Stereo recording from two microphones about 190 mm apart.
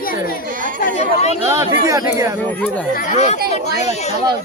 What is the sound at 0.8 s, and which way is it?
Speech, 45° left (ahead or behind).